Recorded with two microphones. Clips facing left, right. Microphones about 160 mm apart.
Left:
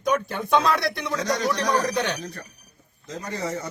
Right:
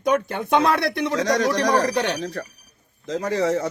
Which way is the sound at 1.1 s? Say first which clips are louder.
Right 4 dB; 90° right.